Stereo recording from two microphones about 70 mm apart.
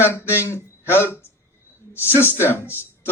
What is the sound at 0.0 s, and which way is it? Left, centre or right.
A man's voice, left.